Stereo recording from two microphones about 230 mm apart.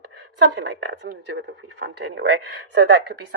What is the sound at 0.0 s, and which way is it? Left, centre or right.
A woman's voice, right.